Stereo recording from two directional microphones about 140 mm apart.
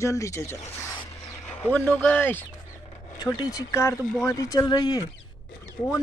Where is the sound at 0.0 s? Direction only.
20° left (ahead or behind).